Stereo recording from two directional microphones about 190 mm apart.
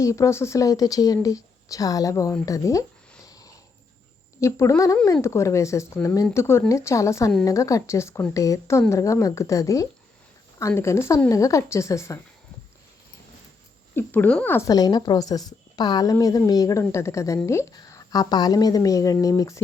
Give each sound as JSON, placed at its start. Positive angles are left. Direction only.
{"t": 0.0, "sound": "a woman's voice", "side_deg": 15}
{"t": 3.2, "sound": "a sound", "side_deg": 20}
{"t": 4.4, "sound": "a woman's voice", "side_deg": 15}
{"t": 13.9, "sound": "a woman's voice", "side_deg": 10}